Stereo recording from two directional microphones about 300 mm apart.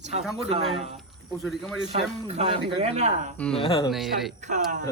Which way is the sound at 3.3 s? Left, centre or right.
Centre.